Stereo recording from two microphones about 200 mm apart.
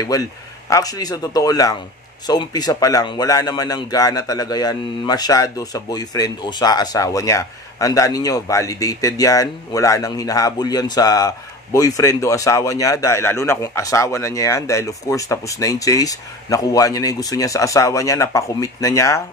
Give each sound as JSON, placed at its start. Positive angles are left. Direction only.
{"t": 0.0, "sound": "speech", "side_deg": 15}